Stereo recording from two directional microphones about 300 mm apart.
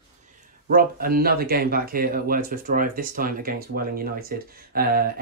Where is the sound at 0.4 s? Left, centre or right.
Right.